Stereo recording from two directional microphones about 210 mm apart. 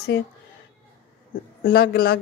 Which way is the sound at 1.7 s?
45° left (ahead or behind).